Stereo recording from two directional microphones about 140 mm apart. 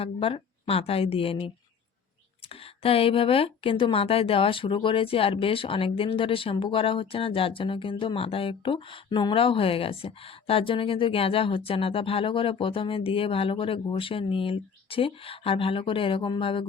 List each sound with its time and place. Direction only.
0.0 s speech: 40° left (ahead or behind)
2.8 s speech: 40° left (ahead or behind)